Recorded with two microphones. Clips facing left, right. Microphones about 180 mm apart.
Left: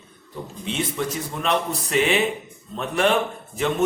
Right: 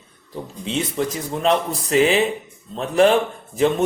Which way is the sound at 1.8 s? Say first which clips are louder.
Right 5 dB; 35° right (ahead or behind).